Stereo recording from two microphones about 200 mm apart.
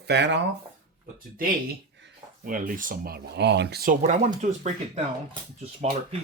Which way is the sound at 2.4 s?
40° right (ahead or behind).